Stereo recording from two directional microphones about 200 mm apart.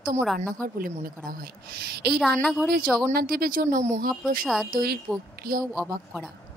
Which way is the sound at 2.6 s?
50° right (ahead or behind).